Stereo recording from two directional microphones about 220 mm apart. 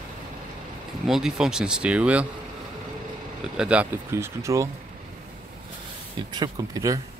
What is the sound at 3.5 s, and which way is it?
Speech, 5° right (ahead or behind).